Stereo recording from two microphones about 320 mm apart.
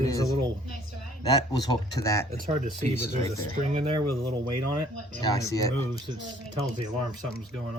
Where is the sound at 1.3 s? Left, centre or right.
Centre.